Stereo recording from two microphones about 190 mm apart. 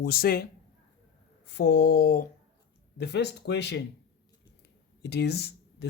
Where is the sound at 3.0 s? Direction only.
60° left (ahead or behind).